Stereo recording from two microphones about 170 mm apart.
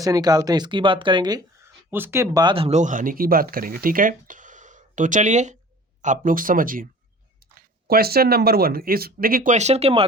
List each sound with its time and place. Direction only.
0.0 s speech: 20° right (ahead or behind)
1.9 s speech: 15° right (ahead or behind)
2.6 s speech: 45° right (ahead or behind)